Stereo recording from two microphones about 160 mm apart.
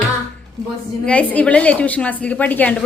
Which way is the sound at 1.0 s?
10° left (ahead or behind).